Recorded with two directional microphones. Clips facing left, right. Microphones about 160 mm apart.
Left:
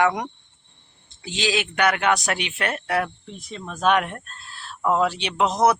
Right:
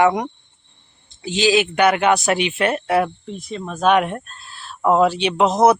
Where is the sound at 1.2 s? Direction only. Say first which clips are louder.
Right 8 dB; 5° right (ahead or behind).